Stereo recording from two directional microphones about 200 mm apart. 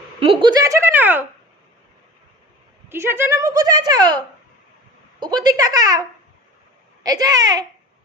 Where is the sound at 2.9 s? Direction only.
10° right (ahead or behind).